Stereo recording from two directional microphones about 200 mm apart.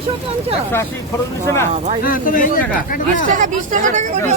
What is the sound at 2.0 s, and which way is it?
Speech, 45° left (ahead or behind).